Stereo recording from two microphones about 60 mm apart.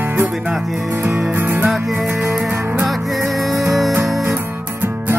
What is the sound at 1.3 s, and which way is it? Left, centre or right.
Music, right.